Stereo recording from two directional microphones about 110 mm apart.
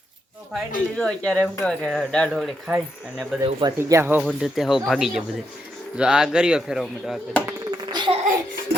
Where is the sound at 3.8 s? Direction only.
20° right (ahead or behind).